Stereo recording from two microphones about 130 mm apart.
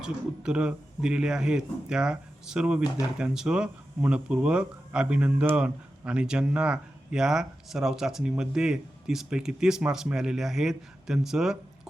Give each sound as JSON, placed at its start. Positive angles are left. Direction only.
{"t": 0.0, "sound": "speech", "side_deg": -5}